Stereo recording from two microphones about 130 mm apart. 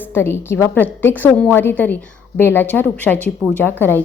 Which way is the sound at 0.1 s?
20° left (ahead or behind).